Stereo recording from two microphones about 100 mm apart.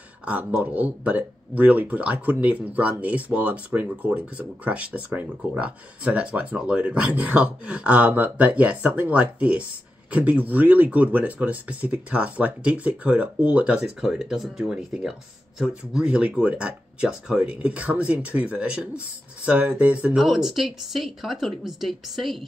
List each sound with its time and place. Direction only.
0.2 s speech: 15° right (ahead or behind)